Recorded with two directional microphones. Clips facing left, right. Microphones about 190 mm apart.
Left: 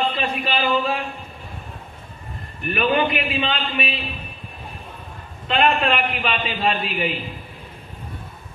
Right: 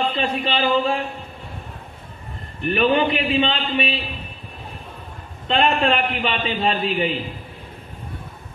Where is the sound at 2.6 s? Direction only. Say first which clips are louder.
Right 2 dB; 25° right (ahead or behind).